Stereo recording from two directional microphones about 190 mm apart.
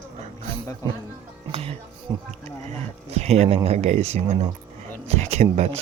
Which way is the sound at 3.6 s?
35° right (ahead or behind).